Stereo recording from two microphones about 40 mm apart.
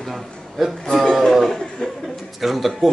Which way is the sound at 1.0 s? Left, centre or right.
Centre.